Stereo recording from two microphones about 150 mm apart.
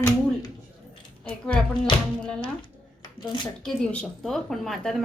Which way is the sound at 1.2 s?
5° left (ahead or behind).